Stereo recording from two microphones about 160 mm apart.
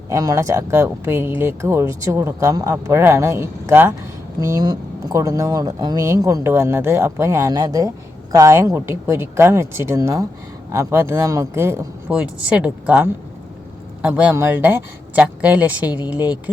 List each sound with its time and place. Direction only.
0.1 s speech: 20° right (ahead or behind)
14.1 s speech: 10° right (ahead or behind)